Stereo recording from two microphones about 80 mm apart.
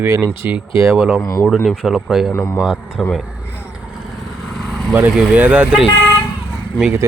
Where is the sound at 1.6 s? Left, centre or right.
Centre.